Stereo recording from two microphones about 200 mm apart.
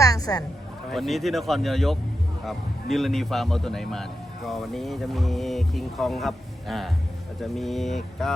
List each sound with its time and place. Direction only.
0.0 s music: 15° left (ahead or behind)
0.9 s a man's voice: centre (ahead or behind)